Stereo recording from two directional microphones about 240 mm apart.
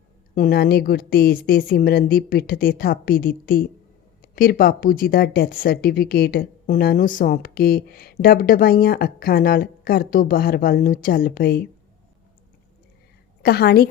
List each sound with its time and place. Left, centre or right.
0.3 s speech: left
13.4 s speech: left